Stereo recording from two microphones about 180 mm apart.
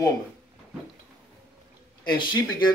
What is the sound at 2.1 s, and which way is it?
Speech, 25° left (ahead or behind).